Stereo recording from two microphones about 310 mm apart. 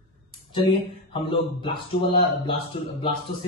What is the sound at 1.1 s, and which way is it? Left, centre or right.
Speech, centre.